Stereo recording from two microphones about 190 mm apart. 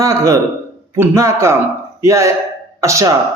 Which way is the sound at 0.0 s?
15° right (ahead or behind).